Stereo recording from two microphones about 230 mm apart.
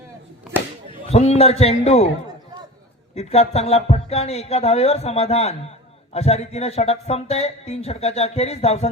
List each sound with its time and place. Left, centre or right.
1.1 s speech: left
3.2 s speech: left